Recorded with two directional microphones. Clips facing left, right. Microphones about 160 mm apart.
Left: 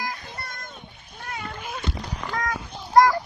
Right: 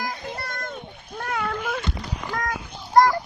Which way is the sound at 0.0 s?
65° right (ahead or behind).